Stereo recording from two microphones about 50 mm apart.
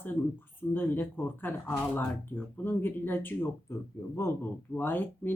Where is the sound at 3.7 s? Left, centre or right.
Left.